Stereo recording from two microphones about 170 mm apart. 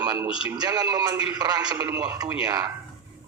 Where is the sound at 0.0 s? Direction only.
25° right (ahead or behind).